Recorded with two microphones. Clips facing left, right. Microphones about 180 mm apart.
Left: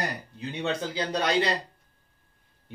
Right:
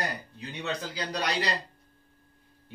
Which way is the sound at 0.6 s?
25° left (ahead or behind).